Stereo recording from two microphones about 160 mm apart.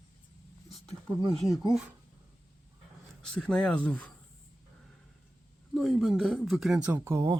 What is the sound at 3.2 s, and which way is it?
Speech, 5° left (ahead or behind).